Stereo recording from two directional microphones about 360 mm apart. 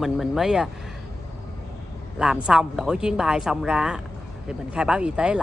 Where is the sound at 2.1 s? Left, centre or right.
Centre.